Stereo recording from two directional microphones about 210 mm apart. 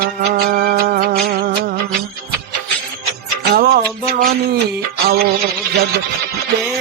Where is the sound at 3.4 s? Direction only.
50° right (ahead or behind).